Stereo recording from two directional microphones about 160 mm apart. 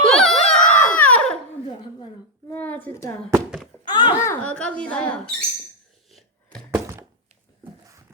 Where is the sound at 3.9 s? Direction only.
30° left (ahead or behind).